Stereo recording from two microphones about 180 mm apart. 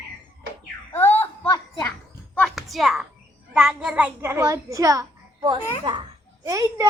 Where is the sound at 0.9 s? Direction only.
10° left (ahead or behind).